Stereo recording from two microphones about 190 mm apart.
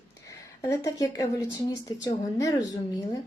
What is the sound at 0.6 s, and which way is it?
Speech, 15° left (ahead or behind).